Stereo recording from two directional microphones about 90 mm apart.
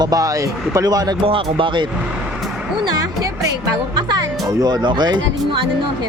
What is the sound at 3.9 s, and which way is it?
Music, 55° right (ahead or behind).